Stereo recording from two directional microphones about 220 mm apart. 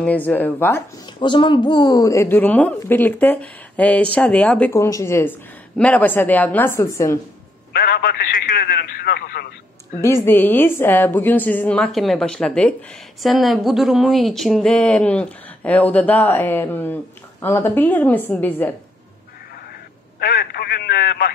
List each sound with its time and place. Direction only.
0.0 s a woman's voice: 5° left (ahead or behind)
1.2 s a woman's voice: 20° left (ahead or behind)
7.7 s speech: 45° left (ahead or behind)
10.0 s a woman's voice: 10° left (ahead or behind)
20.2 s telephone: 45° left (ahead or behind)